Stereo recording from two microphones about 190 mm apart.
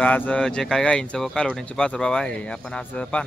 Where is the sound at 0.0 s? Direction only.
5° left (ahead or behind).